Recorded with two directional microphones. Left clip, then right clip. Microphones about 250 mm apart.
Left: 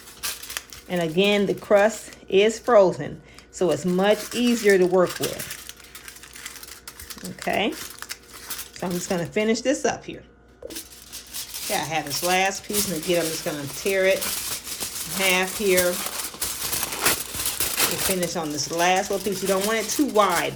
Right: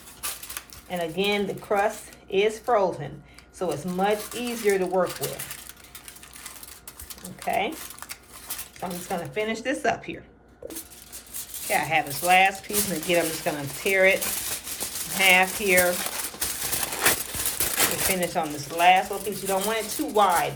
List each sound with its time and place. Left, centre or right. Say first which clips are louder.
0.9 s speech: left 4 dB; left
7.4 s speech: left 2 dB; left
8.8 s speech: left 4 dB; left
9.3 s speech: left 6 dB; left
11.7 s speech: right 2 dB; centre
12.7 s speech: even; centre
13.9 s rattle: right 1 dB; centre
15.2 s speech: right 3 dB; centre
15.9 s crumpling: even; centre
18.2 s speech: even; centre